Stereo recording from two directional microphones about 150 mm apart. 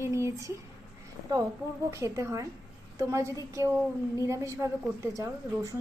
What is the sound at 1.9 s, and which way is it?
A woman's voice, 20° right (ahead or behind).